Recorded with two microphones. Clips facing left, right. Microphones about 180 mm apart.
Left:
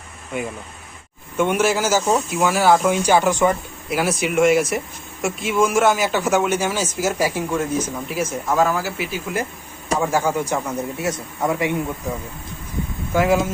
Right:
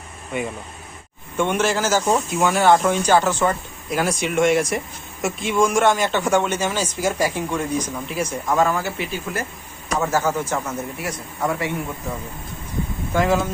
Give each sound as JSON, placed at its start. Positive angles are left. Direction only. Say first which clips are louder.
{"t": 1.4, "sound": "speech", "louder": "left 2 dB", "side_deg": 10}
{"t": 13.1, "sound": "speech", "louder": "left 2 dB", "side_deg": 10}